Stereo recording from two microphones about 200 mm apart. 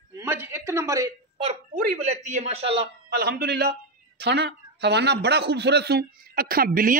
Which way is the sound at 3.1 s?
55° right (ahead or behind).